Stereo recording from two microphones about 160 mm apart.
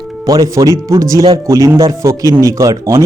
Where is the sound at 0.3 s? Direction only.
20° right (ahead or behind).